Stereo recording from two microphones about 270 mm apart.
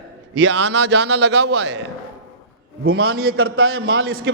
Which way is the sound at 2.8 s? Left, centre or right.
Right.